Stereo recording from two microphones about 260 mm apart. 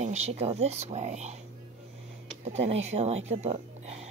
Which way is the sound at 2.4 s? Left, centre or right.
Right.